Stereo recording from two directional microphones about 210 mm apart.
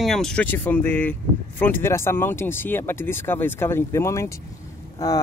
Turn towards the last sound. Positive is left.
turn(degrees=15)  # may be behind; listen again after turning